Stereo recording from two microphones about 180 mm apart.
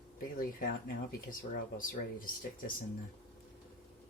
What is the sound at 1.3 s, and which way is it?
Speech, 50° left (ahead or behind).